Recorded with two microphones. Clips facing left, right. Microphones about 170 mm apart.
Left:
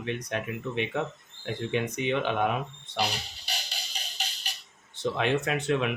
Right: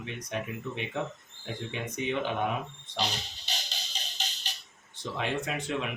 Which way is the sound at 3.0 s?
10° left (ahead or behind).